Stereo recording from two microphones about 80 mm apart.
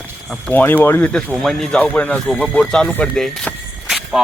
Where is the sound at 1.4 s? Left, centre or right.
Centre.